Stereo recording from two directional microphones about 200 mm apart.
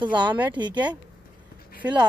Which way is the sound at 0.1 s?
25° right (ahead or behind).